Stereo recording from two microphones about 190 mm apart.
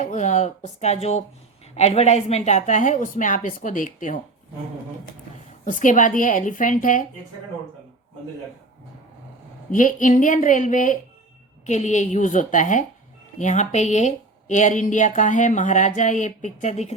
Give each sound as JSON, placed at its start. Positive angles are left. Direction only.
{"t": 0.0, "sound": "speech", "side_deg": 40}
{"t": 5.6, "sound": "a woman's voice", "side_deg": 40}
{"t": 9.7, "sound": "a woman's voice", "side_deg": 45}